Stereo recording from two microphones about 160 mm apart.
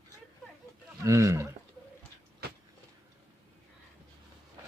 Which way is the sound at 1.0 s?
20° right (ahead or behind).